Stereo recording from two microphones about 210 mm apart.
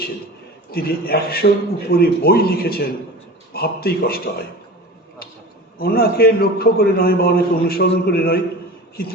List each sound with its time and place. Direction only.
0.7 s a man's voice: 45° left (ahead or behind)
5.8 s a man's voice: 45° left (ahead or behind)